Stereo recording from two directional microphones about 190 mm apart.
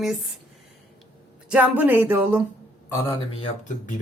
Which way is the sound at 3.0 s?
15° left (ahead or behind).